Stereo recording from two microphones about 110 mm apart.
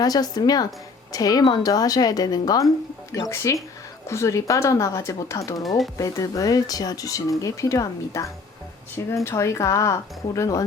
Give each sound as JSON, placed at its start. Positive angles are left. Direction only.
{"t": 0.0, "sound": "speech", "side_deg": 35}
{"t": 5.6, "sound": "speech", "side_deg": 0}
{"t": 6.0, "sound": "speech", "side_deg": 30}